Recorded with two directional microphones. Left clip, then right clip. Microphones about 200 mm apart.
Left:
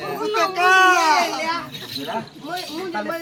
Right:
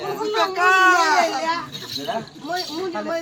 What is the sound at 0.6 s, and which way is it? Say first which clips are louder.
Speech: left 1 dB; 10° left (ahead or behind).